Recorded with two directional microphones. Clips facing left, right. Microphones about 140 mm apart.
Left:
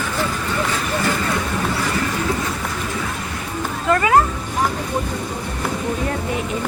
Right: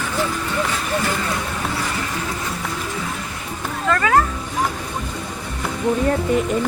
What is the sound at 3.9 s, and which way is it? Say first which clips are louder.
Speech: left 2 dB; 20° left (ahead or behind).